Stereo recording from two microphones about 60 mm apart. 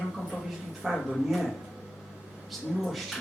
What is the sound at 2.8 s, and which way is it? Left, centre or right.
Speech, centre.